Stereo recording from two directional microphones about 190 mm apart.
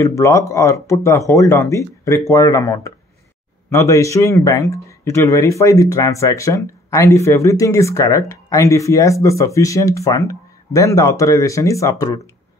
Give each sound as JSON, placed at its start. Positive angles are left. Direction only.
{"t": 0.0, "sound": "speech", "side_deg": 15}